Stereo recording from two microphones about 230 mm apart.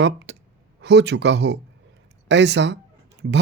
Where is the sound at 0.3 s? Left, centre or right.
Right.